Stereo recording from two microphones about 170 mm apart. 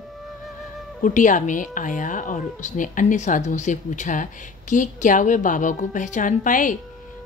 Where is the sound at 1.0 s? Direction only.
50° left (ahead or behind).